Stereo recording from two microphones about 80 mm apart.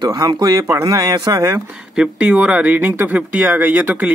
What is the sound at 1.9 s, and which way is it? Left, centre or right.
Speech, centre.